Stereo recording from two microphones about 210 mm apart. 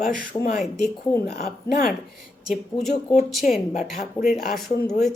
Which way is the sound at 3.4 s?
40° left (ahead or behind).